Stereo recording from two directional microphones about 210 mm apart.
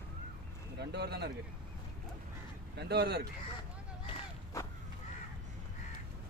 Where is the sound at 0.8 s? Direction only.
50° right (ahead or behind).